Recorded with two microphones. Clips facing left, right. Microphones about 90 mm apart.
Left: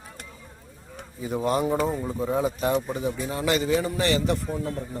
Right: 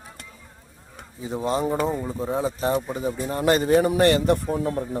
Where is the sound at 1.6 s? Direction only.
Centre (ahead or behind).